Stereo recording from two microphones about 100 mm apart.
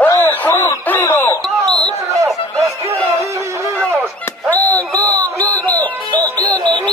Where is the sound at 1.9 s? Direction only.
30° right (ahead or behind).